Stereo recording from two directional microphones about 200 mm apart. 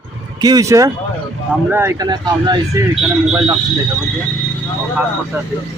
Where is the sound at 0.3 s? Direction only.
20° right (ahead or behind).